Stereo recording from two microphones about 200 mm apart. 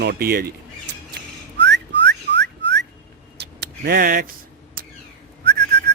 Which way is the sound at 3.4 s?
55° right (ahead or behind).